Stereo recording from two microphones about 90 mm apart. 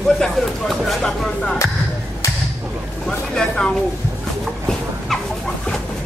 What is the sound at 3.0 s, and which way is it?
Vehicle, 10° left (ahead or behind).